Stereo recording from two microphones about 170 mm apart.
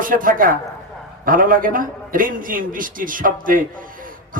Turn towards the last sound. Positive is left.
turn(degrees=-55)  # may be behind; listen again after turning